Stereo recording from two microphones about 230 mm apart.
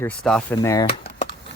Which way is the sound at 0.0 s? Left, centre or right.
Centre.